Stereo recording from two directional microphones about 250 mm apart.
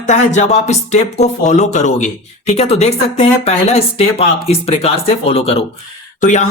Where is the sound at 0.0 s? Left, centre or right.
Left.